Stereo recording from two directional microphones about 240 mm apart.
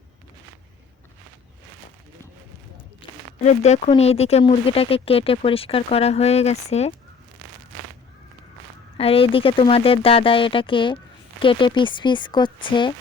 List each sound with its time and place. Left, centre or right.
3.0 s a sound: left
3.4 s speech: left
9.0 s speech: left